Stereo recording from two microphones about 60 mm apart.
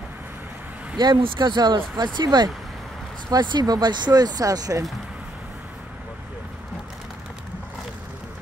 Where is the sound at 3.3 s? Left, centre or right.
Right.